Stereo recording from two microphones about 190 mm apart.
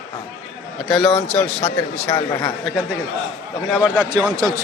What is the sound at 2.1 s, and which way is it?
Speech, 20° left (ahead or behind).